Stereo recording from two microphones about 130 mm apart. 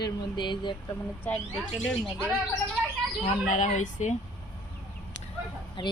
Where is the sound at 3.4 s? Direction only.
65° left (ahead or behind).